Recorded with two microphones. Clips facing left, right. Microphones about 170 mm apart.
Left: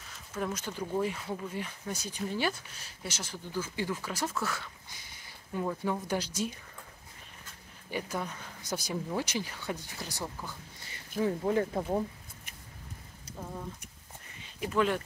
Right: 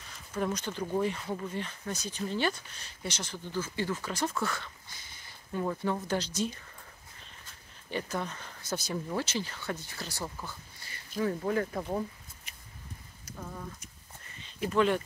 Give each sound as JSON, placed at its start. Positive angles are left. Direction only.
{"t": 0.1, "sound": "speech", "side_deg": 0}
{"t": 7.9, "sound": "speech", "side_deg": 10}
{"t": 14.6, "sound": "speech", "side_deg": 5}